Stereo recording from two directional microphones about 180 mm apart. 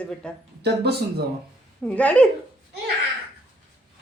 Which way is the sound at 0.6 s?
65° right (ahead or behind).